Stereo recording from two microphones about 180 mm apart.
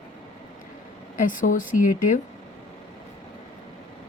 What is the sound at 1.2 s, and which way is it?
Speech, 50° left (ahead or behind).